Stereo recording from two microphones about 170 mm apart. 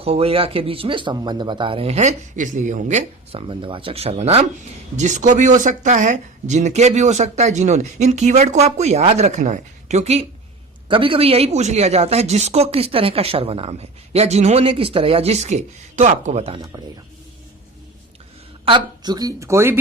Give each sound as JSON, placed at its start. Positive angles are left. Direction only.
{"t": 0.0, "sound": "speech", "side_deg": -35}
{"t": 3.4, "sound": "speech", "side_deg": -30}
{"t": 18.6, "sound": "speech", "side_deg": -25}